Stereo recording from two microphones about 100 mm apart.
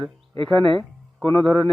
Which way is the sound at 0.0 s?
60° right (ahead or behind).